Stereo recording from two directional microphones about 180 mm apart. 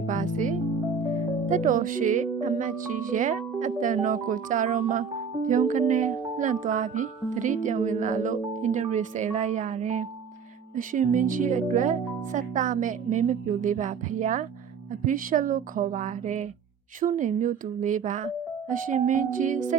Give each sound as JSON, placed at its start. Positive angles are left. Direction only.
{"t": 0.1, "sound": "speech", "side_deg": -45}